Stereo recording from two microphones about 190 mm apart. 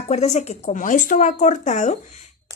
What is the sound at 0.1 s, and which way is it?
Speech, 35° left (ahead or behind).